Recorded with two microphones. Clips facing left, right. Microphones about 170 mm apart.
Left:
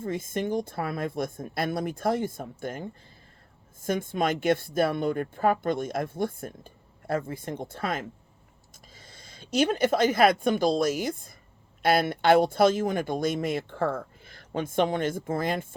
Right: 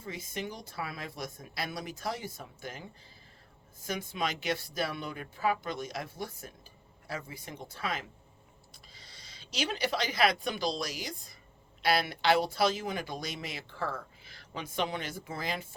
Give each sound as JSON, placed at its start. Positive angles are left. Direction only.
{"t": 0.0, "sound": "speech", "side_deg": 50}